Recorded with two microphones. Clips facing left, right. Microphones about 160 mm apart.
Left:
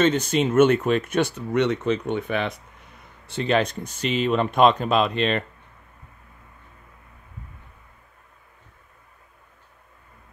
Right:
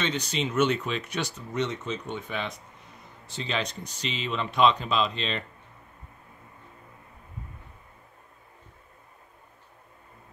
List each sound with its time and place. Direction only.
0.0 s speech: 50° left (ahead or behind)